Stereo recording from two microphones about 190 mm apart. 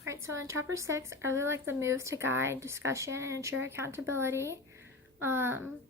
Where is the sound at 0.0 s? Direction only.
15° right (ahead or behind).